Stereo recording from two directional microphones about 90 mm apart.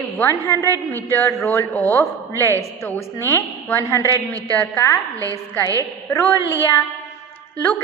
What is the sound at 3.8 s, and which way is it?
Speech, 35° left (ahead or behind).